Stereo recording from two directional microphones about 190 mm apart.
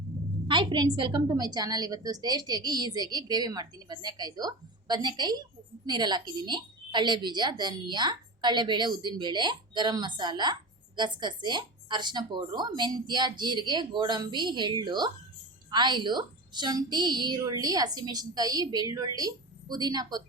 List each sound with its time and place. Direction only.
0.4 s speech: 25° right (ahead or behind)